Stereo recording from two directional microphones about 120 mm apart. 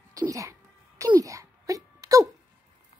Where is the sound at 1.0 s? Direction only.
30° right (ahead or behind).